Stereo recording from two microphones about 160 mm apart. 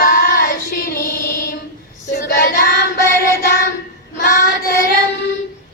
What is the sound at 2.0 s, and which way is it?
Child singing, 60° left (ahead or behind).